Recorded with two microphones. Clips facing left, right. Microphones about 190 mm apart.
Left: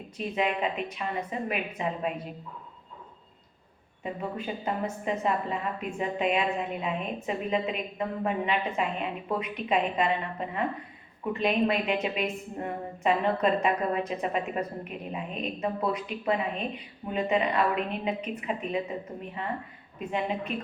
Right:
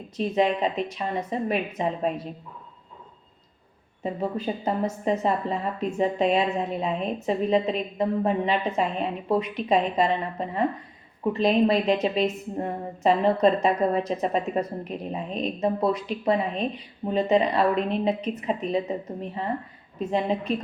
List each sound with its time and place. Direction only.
0.2 s a woman's voice: 35° right (ahead or behind)
4.0 s a woman's voice: 35° right (ahead or behind)